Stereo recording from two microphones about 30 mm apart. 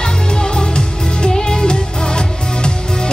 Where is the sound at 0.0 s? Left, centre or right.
Left.